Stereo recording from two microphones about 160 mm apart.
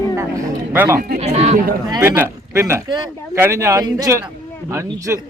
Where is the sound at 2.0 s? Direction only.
15° right (ahead or behind).